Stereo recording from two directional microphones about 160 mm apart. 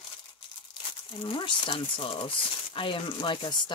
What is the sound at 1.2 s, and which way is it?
Speech, 35° left (ahead or behind).